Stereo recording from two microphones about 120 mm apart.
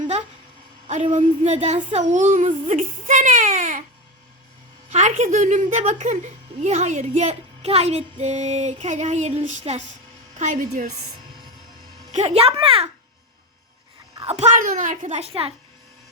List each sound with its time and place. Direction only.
1.1 s speech: 70° right (ahead or behind); by 3.8 s 90° right
4.9 s speech: 75° right (ahead or behind)
12.1 s a child's voice: 60° right (ahead or behind)
14.2 s speech: 65° right (ahead or behind); by 15.3 s 80° right
15.3 s a child's voice: 55° right (ahead or behind)